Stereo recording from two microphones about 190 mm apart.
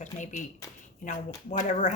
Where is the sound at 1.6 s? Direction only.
40° left (ahead or behind).